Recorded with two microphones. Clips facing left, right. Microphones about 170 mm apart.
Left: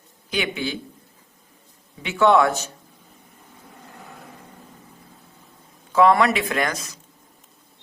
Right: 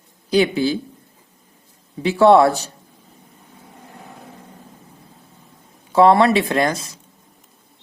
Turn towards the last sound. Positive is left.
turn(degrees=-30)  # may be behind; listen again after turning